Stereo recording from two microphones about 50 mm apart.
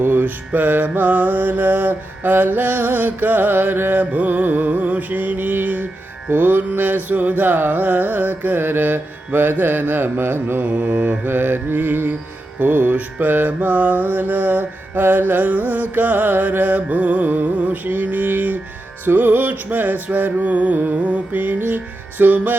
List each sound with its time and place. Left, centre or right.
0.0 s music: right
4.0 s music: right
10.6 s music: right